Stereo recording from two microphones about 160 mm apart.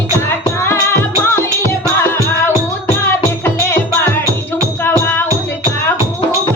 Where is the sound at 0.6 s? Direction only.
15° left (ahead or behind).